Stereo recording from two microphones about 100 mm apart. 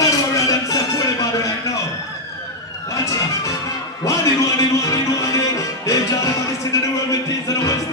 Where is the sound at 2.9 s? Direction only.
30° left (ahead or behind).